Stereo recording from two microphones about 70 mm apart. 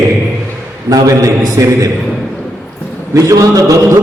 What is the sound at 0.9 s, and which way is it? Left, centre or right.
A man's voice, right.